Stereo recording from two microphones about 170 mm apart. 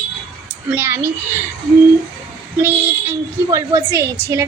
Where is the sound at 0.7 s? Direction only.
10° right (ahead or behind).